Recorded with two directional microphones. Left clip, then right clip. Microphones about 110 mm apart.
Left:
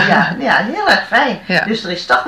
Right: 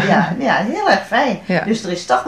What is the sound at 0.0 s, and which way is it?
Speech, 25° right (ahead or behind).